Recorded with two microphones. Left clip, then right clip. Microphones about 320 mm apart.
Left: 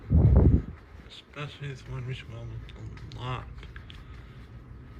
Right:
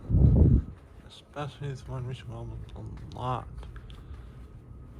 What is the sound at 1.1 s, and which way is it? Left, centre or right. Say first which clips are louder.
Speech: right 2 dB; centre.